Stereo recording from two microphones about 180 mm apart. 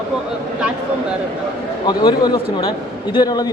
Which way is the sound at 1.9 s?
25° left (ahead or behind).